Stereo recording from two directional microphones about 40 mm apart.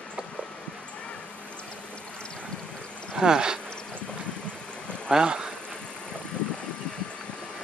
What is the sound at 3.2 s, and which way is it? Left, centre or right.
Speech, centre.